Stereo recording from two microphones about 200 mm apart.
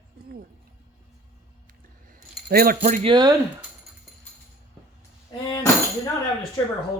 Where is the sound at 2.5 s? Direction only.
45° right (ahead or behind).